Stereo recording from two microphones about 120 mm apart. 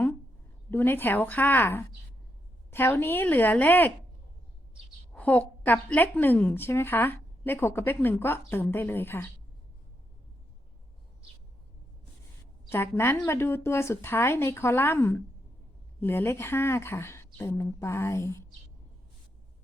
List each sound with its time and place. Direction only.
0.7 s a woman's voice: 15° left (ahead or behind)
5.1 s a woman's voice: 15° left (ahead or behind)
12.7 s speech: 20° left (ahead or behind)